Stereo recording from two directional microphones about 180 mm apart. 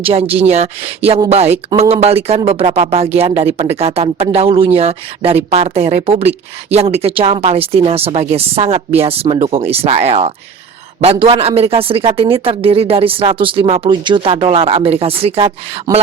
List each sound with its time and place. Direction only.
0.0 s speech: 35° right (ahead or behind)